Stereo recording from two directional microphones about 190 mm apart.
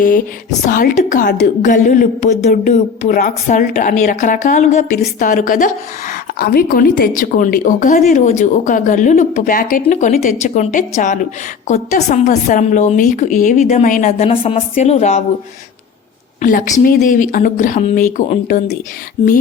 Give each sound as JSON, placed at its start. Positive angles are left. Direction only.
{"t": 0.7, "sound": "a woman's voice", "side_deg": 45}
{"t": 16.4, "sound": "speech", "side_deg": 45}